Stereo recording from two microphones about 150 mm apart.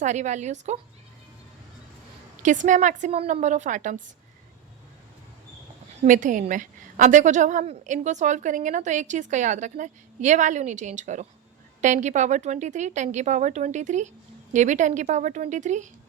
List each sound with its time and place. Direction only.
0.0 s a woman's voice: 50° right (ahead or behind)
2.4 s a woman's voice: 55° right (ahead or behind)
6.1 s a woman's voice: 60° right (ahead or behind)